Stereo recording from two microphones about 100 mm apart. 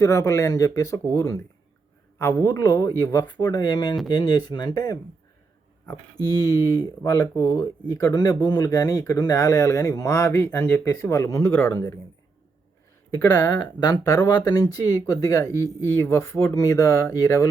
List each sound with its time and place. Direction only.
0.0 s speech: 30° left (ahead or behind)
6.4 s speech: 35° left (ahead or behind)
13.1 s speech: 25° left (ahead or behind)
13.6 s speech: 45° left (ahead or behind)